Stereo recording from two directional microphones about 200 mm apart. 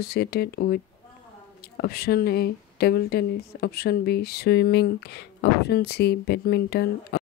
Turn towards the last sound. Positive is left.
turn(degrees=55)  # may be behind; listen again after turning